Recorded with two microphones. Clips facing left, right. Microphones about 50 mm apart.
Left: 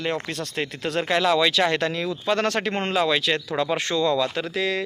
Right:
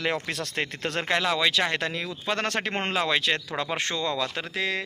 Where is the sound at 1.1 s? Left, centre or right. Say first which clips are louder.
Left 4 dB; centre.